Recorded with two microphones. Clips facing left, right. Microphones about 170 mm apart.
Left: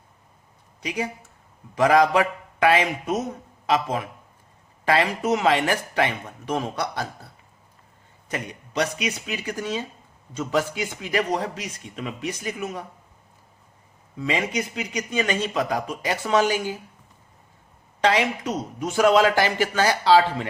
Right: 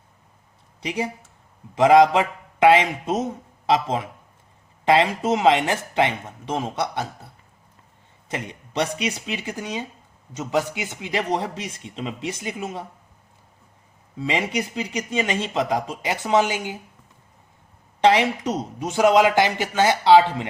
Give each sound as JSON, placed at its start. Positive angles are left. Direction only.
{"t": 0.8, "sound": "speech", "side_deg": -30}
{"t": 8.3, "sound": "speech", "side_deg": -30}
{"t": 14.2, "sound": "speech", "side_deg": -25}
{"t": 18.0, "sound": "speech", "side_deg": -25}